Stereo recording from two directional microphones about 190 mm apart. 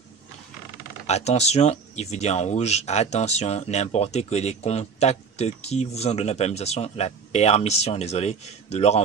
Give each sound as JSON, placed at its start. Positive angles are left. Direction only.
{"t": 1.0, "sound": "speech", "side_deg": 35}